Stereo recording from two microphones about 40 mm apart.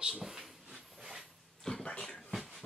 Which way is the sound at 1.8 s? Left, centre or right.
Left.